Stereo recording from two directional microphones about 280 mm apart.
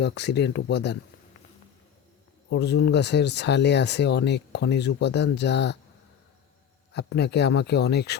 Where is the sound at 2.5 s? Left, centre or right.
Left.